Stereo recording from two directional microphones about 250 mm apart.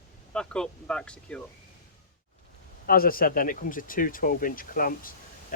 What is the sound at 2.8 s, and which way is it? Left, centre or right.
Speech, left.